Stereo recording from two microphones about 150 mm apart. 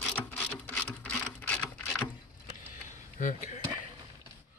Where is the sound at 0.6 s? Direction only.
10° left (ahead or behind).